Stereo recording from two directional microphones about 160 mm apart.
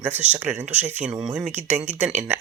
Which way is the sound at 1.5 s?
45° right (ahead or behind).